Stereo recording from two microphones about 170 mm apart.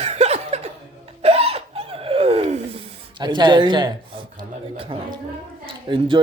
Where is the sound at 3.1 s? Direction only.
25° right (ahead or behind).